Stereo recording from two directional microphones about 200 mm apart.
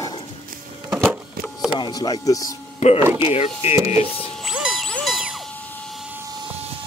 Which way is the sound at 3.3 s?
30° left (ahead or behind).